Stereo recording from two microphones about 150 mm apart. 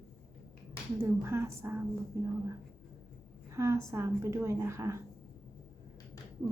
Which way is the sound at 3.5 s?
20° right (ahead or behind).